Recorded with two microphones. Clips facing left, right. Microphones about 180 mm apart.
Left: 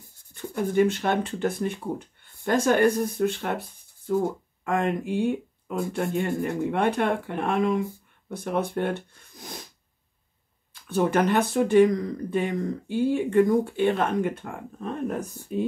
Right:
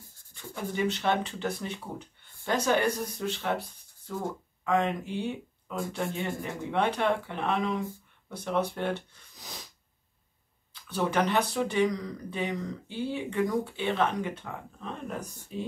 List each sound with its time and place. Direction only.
0.3 s speech: 50° left (ahead or behind)
10.7 s speech: 50° left (ahead or behind)